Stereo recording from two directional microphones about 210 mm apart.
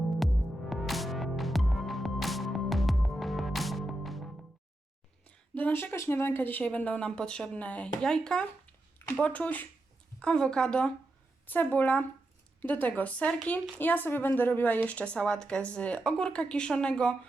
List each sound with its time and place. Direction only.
0.2 s music: centre (ahead or behind)
5.5 s speech: 10° left (ahead or behind)